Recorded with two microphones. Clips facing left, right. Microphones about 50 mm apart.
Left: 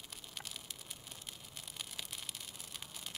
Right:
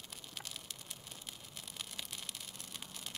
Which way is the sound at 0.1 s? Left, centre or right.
Centre.